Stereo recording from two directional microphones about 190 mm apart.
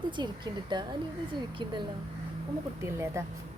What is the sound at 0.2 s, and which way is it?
Speech, 25° right (ahead or behind).